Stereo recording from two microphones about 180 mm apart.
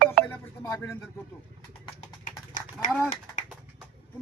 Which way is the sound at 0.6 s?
20° left (ahead or behind).